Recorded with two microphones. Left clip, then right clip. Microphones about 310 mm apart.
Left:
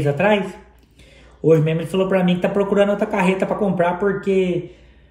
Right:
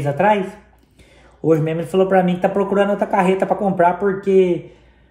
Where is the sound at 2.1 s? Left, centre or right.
Centre.